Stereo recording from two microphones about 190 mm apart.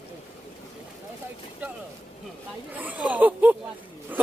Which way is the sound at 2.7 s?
10° right (ahead or behind).